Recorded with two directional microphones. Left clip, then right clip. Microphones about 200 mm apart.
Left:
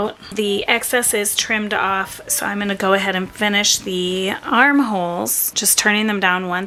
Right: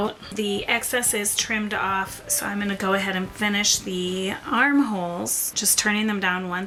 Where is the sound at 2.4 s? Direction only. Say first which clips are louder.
Left 7 dB; 20° left (ahead or behind).